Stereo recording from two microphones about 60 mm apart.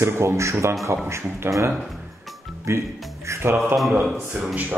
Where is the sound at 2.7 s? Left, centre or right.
Right.